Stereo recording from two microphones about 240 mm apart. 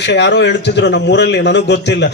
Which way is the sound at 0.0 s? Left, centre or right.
Left.